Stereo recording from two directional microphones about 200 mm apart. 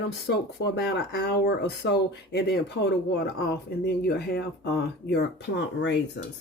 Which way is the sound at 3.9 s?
55° left (ahead or behind).